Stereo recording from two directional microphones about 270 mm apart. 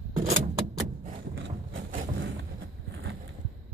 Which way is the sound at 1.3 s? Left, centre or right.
Right.